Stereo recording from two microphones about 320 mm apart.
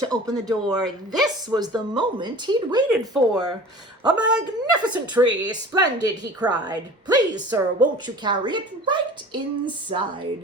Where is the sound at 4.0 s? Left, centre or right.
Centre.